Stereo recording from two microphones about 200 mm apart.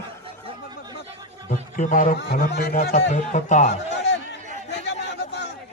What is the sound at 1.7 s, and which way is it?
Speech, 40° left (ahead or behind).